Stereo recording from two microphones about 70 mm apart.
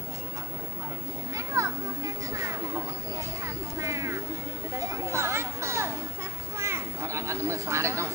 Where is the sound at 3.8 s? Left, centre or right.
Right.